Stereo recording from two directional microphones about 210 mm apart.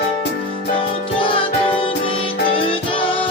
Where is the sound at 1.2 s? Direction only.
25° left (ahead or behind).